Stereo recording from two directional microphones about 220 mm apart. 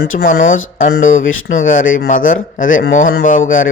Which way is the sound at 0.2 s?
40° left (ahead or behind).